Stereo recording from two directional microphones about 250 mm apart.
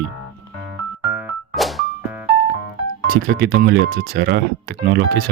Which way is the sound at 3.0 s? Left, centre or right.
Right.